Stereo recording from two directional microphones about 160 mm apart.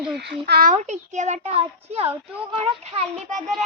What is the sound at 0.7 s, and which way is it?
A child's voice, 50° right (ahead or behind).